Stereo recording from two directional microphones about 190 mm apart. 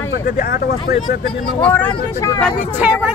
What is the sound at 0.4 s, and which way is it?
Speech, 50° left (ahead or behind).